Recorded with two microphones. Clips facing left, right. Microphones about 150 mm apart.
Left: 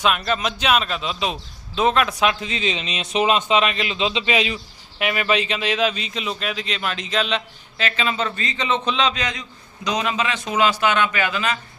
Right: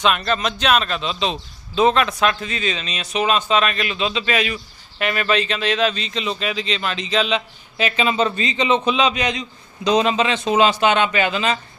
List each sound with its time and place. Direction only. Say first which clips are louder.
0.0 s speech: right 1 dB; 5° left (ahead or behind)
4.9 s speech: right 1 dB; 10° left (ahead or behind)
7.8 s a man's voice: right 5 dB; 15° right (ahead or behind)